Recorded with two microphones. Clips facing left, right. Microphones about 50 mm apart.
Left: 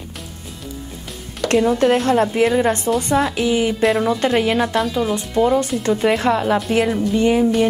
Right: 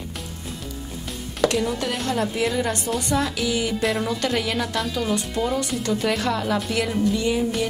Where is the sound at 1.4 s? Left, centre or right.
Centre.